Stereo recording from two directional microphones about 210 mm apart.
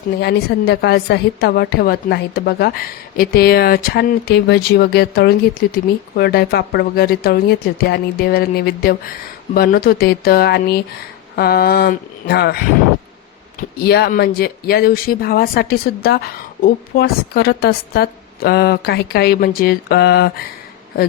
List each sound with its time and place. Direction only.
0.2 s speech: 50° left (ahead or behind)
13.6 s speech: 50° left (ahead or behind)